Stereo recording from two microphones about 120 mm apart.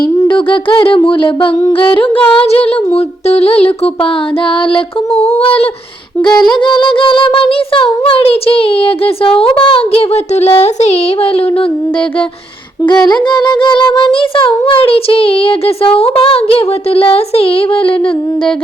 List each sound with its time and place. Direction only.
0.3 s music: 45° left (ahead or behind)
4.7 s music: 55° left (ahead or behind)
6.5 s music: 40° left (ahead or behind); by 11.3 s 65° left (ahead or behind)
12.9 s music: 40° left (ahead or behind)